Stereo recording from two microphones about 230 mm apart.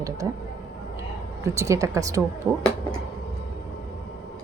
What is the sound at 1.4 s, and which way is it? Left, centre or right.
Speech, centre.